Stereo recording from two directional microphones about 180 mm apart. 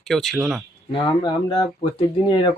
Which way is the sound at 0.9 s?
25° left (ahead or behind).